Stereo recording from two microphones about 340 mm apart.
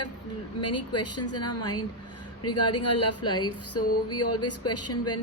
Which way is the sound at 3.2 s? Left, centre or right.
Centre.